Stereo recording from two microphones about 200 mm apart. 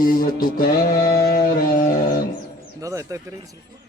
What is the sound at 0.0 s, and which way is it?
Music, 45° left (ahead or behind).